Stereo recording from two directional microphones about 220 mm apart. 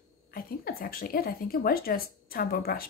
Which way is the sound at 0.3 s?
40° left (ahead or behind).